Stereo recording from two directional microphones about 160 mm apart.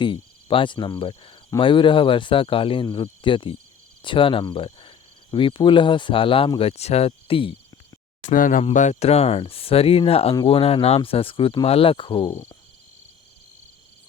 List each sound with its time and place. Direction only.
0.0 s cricket: 30° left (ahead or behind)
8.2 s speech: 55° left (ahead or behind)
8.7 s cricket: 45° left (ahead or behind); by 12.4 s 30° left (ahead or behind)